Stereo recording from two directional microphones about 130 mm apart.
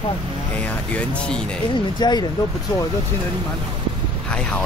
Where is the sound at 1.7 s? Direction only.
35° left (ahead or behind).